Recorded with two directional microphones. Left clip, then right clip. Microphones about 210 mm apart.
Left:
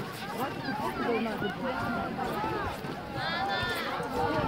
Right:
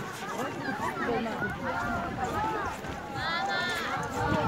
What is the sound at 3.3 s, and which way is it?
Run, 25° left (ahead or behind).